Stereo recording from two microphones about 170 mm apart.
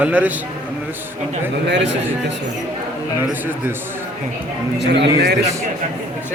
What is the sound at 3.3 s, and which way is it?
Speech, 10° right (ahead or behind).